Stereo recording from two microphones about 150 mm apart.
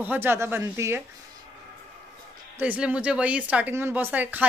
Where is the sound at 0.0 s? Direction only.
15° right (ahead or behind).